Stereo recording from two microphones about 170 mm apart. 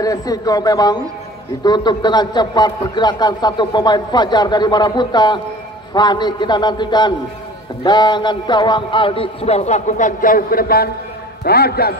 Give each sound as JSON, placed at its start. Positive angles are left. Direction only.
{"t": 0.0, "sound": "a man's voice", "side_deg": 20}